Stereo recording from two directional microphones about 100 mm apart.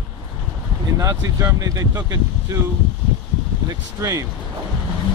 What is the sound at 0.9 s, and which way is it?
Speech, 35° right (ahead or behind).